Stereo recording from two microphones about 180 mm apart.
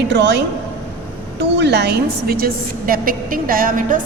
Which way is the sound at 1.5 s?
70° right (ahead or behind).